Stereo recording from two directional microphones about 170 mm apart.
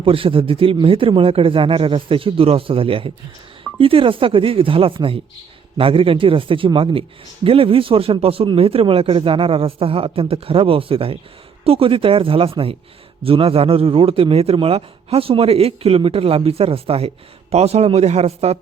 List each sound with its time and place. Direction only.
0.0 s a man's voice: 30° right (ahead or behind)